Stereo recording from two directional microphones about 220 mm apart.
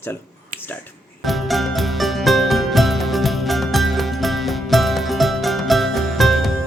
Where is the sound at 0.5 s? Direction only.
40° right (ahead or behind).